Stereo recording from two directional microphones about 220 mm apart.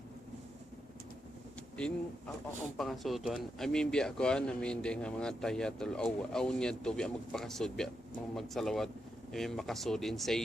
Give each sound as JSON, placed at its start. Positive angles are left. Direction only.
{"t": 1.7, "sound": "speech", "side_deg": 5}